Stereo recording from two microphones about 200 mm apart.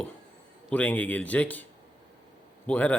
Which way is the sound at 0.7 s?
10° left (ahead or behind).